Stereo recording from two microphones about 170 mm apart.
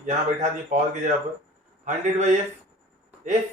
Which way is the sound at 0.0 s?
45° right (ahead or behind).